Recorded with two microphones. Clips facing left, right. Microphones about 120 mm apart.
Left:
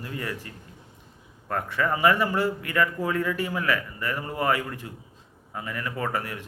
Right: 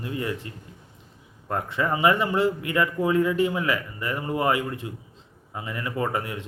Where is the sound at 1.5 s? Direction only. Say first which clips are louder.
Right 1 dB; 20° right (ahead or behind).